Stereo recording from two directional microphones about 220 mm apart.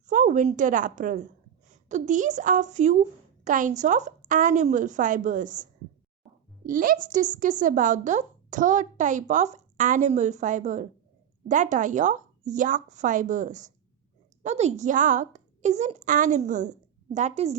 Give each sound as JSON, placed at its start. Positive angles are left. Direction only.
{"t": 0.1, "sound": "a woman's voice", "side_deg": -35}
{"t": 6.7, "sound": "speech", "side_deg": -40}